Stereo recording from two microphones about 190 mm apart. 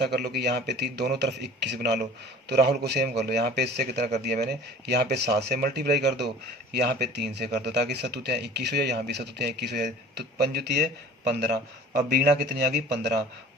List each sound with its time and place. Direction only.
0.0 s speech: 60° right (ahead or behind)